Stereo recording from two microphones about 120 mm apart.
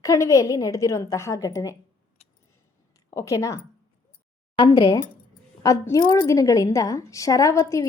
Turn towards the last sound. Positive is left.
turn(degrees=25)  # may be behind; listen again after turning